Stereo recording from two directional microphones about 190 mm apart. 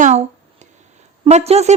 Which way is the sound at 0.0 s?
35° right (ahead or behind).